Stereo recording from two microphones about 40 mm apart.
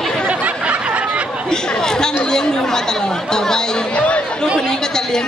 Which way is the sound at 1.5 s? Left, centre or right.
Centre.